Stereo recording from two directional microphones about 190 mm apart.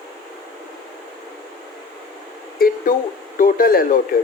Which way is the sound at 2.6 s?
50° left (ahead or behind).